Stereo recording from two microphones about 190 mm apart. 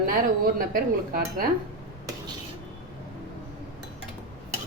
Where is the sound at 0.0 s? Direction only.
50° right (ahead or behind).